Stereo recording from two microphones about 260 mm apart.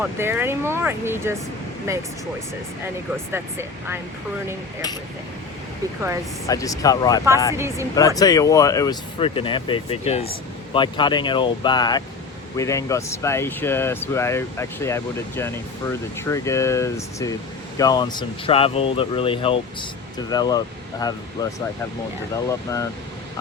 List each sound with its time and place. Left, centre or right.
0.0 s speech: centre
3.3 s speech: centre
6.5 s speech: centre
7.5 s speech: centre
7.9 s speech: centre